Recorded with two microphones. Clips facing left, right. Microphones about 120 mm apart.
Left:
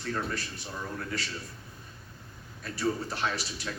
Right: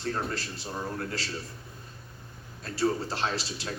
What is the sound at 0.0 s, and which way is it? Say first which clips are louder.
A man's voice: right 1 dB; 30° right (ahead or behind).